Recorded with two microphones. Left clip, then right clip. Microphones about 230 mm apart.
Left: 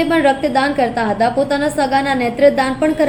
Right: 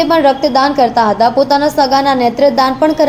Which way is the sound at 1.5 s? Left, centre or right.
Centre.